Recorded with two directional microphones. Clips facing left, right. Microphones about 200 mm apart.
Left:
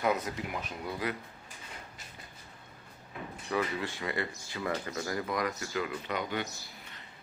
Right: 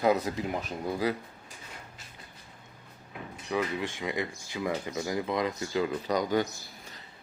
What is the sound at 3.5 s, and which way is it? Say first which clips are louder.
Speech: right 2 dB; 15° right (ahead or behind).